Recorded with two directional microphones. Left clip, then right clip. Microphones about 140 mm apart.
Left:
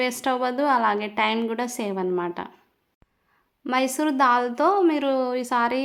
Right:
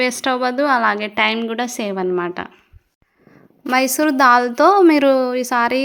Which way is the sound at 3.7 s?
30° right (ahead or behind).